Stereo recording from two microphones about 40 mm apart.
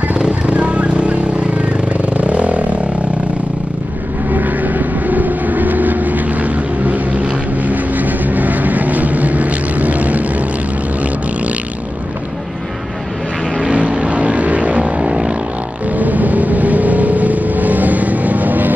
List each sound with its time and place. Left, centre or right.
0.1 s vehicle: right
4.3 s vehicle: right
13.6 s vehicle: right
15.9 s vehicle: right